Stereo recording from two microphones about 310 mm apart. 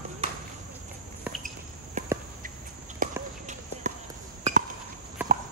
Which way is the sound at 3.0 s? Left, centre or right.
Right.